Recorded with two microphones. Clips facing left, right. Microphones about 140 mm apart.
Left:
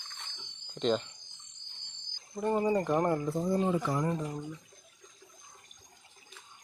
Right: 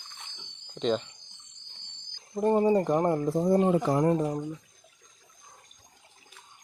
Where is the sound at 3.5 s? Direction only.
50° right (ahead or behind).